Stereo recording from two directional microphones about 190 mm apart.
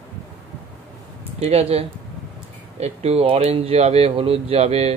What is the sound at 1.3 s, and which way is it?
Speech, 35° right (ahead or behind).